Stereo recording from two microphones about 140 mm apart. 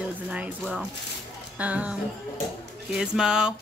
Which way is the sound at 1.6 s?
10° right (ahead or behind).